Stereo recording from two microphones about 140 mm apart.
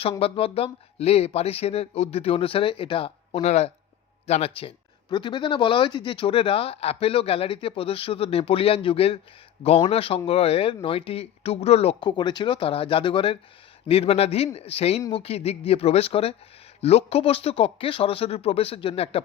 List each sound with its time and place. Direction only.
0.2 s speech: 45° left (ahead or behind)
11.9 s speech: 30° left (ahead or behind)